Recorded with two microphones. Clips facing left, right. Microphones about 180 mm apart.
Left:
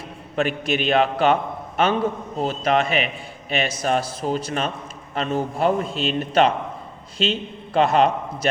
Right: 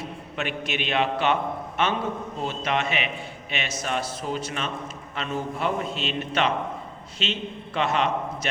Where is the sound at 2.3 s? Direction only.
40° left (ahead or behind).